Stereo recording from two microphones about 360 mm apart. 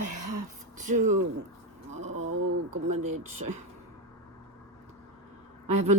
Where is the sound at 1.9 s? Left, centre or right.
Centre.